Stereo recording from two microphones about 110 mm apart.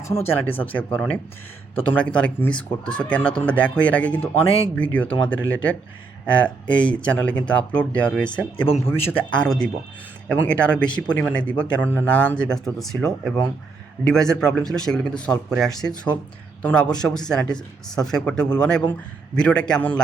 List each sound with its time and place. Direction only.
0.1 s speech: 20° left (ahead or behind)
8.8 s a man's voice: 20° left (ahead or behind)
9.3 s speech: 5° left (ahead or behind)
12.5 s speech: 5° left (ahead or behind)